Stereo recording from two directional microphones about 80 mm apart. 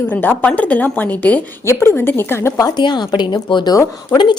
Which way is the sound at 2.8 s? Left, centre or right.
Left.